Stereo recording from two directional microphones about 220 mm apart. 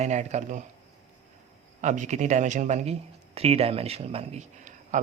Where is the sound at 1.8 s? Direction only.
35° right (ahead or behind).